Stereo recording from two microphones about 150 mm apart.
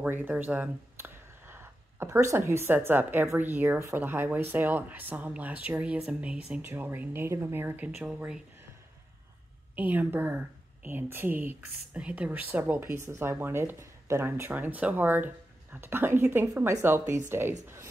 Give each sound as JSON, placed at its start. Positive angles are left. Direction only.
{"t": 0.0, "sound": "a woman's voice", "side_deg": -10}
{"t": 9.8, "sound": "a woman's voice", "side_deg": -10}